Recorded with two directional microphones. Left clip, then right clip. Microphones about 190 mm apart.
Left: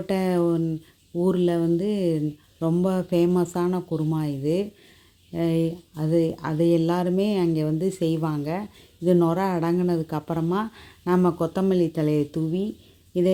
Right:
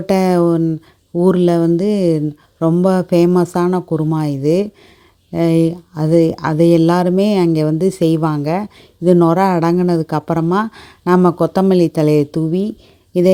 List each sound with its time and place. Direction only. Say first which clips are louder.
0.1 s a man's voice: right 10 dB; 40° right (ahead or behind)